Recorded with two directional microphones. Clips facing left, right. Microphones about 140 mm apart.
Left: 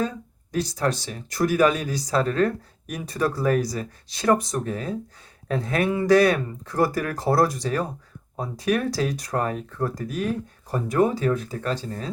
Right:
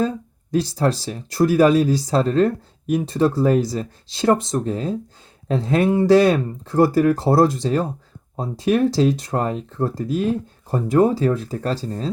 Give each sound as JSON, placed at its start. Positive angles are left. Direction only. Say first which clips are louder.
{"t": 0.0, "sound": "speech", "louder": "right 5 dB", "side_deg": -30}